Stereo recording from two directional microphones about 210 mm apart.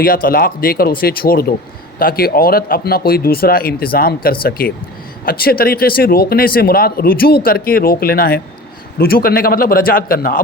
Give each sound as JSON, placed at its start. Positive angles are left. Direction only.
{"t": 0.0, "sound": "speech", "side_deg": 45}